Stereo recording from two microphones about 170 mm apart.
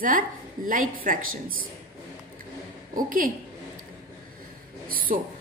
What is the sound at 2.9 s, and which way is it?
Speech, 55° right (ahead or behind).